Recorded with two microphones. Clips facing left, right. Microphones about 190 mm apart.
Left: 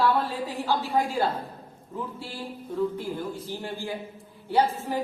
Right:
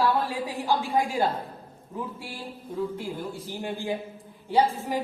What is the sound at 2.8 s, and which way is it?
A woman's voice, 10° right (ahead or behind).